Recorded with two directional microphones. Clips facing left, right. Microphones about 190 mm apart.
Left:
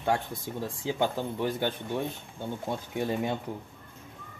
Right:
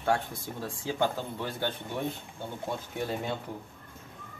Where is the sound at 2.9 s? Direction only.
15° left (ahead or behind).